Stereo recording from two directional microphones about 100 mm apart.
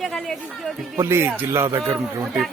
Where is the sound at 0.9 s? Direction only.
25° right (ahead or behind).